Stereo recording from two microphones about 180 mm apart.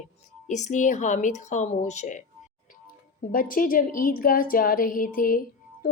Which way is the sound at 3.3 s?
50° left (ahead or behind).